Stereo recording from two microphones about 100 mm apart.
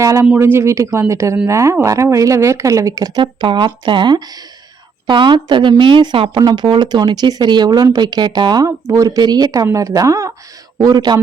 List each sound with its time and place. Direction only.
0.0 s speech: 30° right (ahead or behind)
3.4 s a woman's voice: 55° right (ahead or behind)
8.6 s a woman's voice: 35° right (ahead or behind)